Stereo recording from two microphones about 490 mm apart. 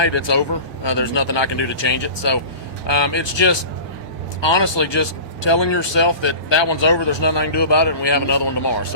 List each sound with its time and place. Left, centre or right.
0.0 s speech: left